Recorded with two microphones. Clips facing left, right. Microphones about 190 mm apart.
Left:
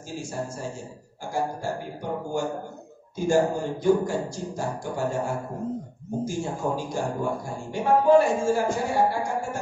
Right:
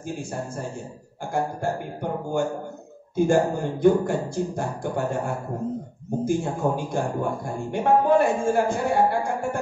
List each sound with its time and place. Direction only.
0.2 s speech: 55° right (ahead or behind)